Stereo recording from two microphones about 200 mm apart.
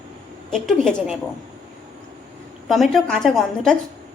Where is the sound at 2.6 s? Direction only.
Centre (ahead or behind).